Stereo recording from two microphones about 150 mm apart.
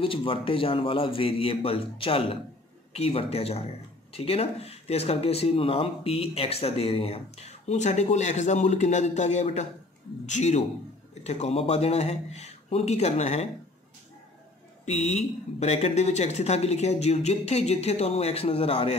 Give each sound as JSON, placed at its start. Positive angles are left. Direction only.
{"t": 0.0, "sound": "a man's voice", "side_deg": 35}
{"t": 14.9, "sound": "speech", "side_deg": 50}